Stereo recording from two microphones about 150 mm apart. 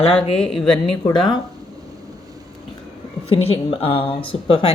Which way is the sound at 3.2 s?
40° left (ahead or behind).